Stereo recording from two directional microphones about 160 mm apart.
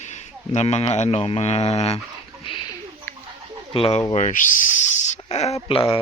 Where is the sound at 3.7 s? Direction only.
35° left (ahead or behind).